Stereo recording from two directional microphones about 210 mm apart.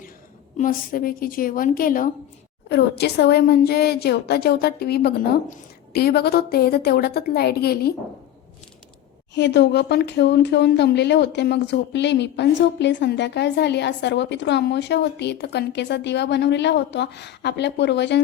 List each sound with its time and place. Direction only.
0.5 s a woman's voice: 40° left (ahead or behind)
2.6 s a woman's voice: 50° left (ahead or behind)
9.3 s speech: 55° left (ahead or behind)